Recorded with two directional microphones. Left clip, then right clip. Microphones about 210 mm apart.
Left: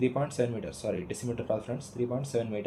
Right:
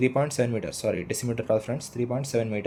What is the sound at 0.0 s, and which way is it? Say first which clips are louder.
Speech: right 5 dB; 55° right (ahead or behind).